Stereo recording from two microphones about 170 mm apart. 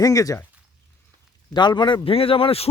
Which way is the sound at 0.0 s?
20° left (ahead or behind).